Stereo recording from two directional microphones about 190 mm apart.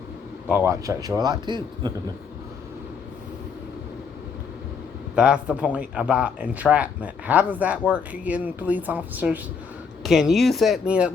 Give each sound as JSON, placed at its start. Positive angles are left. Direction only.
{"t": 0.4, "sound": "a man's voice", "side_deg": -10}
{"t": 5.1, "sound": "speech", "side_deg": -5}